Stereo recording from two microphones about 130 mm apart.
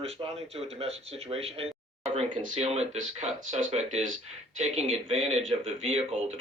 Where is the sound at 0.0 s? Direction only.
50° right (ahead or behind).